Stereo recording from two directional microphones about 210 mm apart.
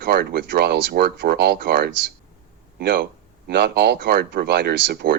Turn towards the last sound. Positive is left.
turn(degrees=-50)  # may be behind; listen again after turning